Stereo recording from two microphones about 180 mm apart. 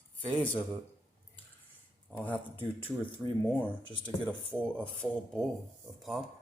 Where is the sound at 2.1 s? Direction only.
10° left (ahead or behind).